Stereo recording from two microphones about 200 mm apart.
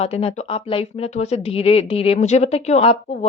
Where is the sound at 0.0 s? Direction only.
30° left (ahead or behind).